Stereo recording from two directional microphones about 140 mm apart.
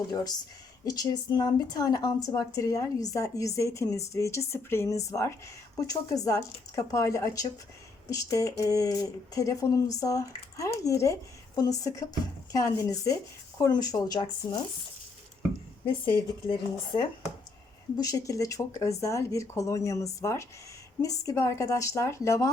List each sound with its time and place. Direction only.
0.9 s speech: 30° left (ahead or behind)
16.0 s speech: 35° left (ahead or behind); by 22.4 s 20° left (ahead or behind)